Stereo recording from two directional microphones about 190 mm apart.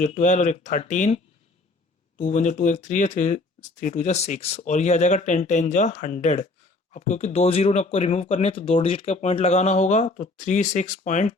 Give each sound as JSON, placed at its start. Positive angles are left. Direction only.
{"t": 0.0, "sound": "speech", "side_deg": 40}